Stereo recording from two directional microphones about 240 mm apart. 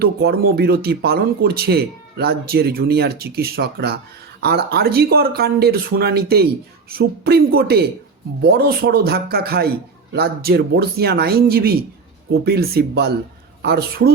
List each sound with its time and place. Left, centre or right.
0.0 s speech: right